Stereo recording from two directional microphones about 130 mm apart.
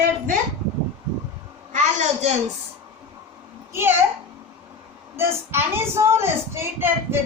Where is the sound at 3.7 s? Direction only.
20° right (ahead or behind).